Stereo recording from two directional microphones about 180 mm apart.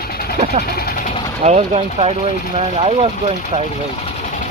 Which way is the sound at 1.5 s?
35° right (ahead or behind).